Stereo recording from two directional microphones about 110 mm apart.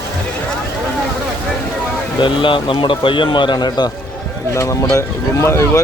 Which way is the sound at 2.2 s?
50° left (ahead or behind).